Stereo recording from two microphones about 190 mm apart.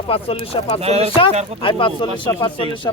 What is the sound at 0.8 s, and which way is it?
Speech, 35° right (ahead or behind).